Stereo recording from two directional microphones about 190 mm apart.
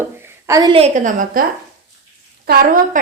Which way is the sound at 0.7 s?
35° right (ahead or behind).